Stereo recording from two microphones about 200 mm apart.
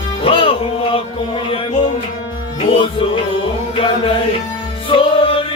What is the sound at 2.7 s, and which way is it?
Music, 25° left (ahead or behind).